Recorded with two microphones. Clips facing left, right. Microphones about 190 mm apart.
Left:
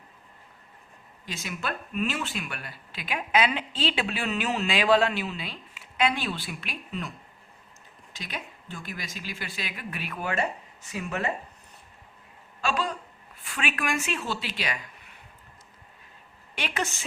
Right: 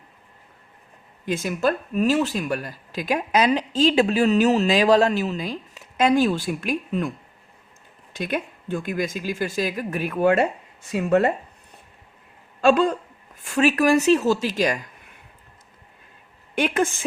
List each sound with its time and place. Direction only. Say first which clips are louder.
1.2 s speech: right 12 dB; 50° right (ahead or behind)
8.1 s speech: right 12 dB; 55° right (ahead or behind)
12.6 s speech: right 12 dB; 55° right (ahead or behind)
13.4 s speech: right 13 dB; 40° right (ahead or behind)
16.6 s speech: right 10 dB; 50° right (ahead or behind)